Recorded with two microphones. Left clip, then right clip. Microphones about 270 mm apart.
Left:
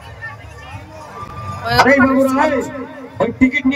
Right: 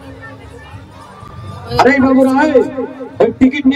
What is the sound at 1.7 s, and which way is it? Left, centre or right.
A man's voice, centre.